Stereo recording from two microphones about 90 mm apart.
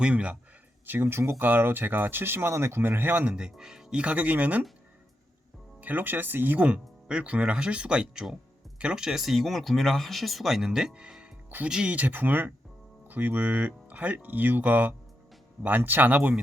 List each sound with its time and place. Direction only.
0.0 s speech: 15° right (ahead or behind)
0.9 s speech: 25° right (ahead or behind)
3.3 s speech: 5° right (ahead or behind)
5.8 s speech: 20° right (ahead or behind)